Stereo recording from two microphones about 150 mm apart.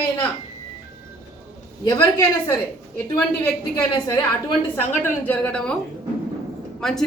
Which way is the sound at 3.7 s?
30° left (ahead or behind).